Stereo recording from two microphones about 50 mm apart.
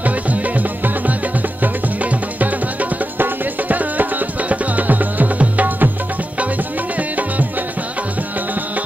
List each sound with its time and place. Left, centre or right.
0.0 s music: right
7.0 s music: right